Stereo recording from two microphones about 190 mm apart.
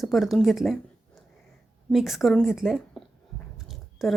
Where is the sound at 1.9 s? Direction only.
Centre (ahead or behind).